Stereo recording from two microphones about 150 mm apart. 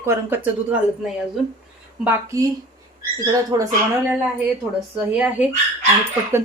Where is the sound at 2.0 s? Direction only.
20° right (ahead or behind).